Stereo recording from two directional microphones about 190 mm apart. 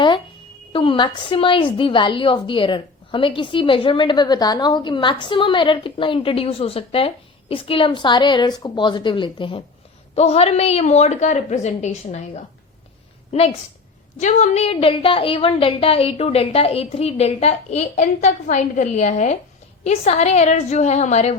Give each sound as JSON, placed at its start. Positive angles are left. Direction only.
{"t": 0.7, "sound": "a woman's voice", "side_deg": 25}